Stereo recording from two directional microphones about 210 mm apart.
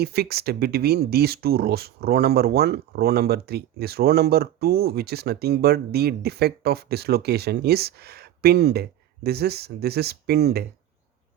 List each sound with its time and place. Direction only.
0.0 s speech: 50° right (ahead or behind)